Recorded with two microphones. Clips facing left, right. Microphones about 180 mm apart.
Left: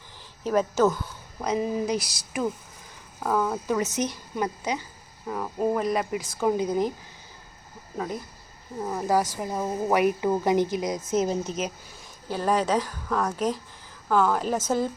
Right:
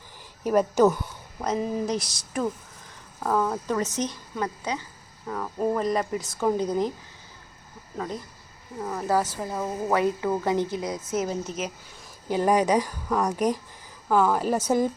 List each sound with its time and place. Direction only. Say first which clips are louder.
0.4 s a woman's voice: right 2 dB; 10° right (ahead or behind)
1.4 s speech: left 1 dB; centre (ahead or behind)
7.9 s speech: left 1 dB; 10° left (ahead or behind)
12.3 s a woman's voice: right 3 dB; 15° right (ahead or behind)